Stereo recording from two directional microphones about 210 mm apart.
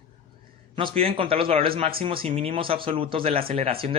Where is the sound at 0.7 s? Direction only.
25° right (ahead or behind).